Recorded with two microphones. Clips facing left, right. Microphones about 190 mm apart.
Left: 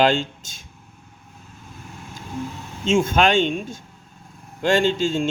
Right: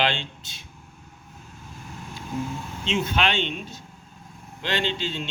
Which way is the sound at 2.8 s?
45° left (ahead or behind).